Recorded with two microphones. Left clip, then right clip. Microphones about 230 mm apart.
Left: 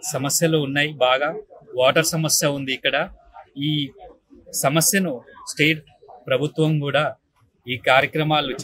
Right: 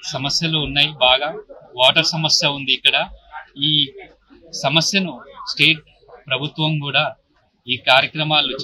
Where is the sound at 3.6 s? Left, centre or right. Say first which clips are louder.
Right 8 dB; left.